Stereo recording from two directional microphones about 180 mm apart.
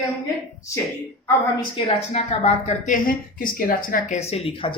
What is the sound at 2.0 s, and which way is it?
Speech, 35° left (ahead or behind).